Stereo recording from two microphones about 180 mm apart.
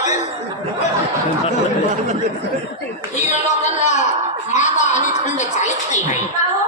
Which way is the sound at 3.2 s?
40° left (ahead or behind).